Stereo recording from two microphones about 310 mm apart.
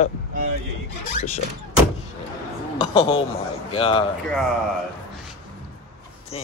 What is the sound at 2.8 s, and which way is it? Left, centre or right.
A man's voice, centre.